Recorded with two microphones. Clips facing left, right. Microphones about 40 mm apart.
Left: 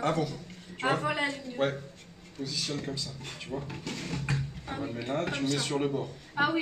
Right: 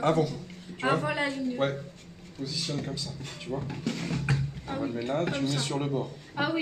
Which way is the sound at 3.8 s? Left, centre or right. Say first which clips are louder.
Right 5 dB; centre.